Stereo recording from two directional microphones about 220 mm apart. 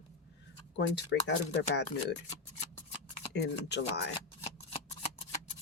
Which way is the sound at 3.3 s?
50° left (ahead or behind).